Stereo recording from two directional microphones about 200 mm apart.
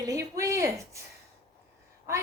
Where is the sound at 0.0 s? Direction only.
15° right (ahead or behind).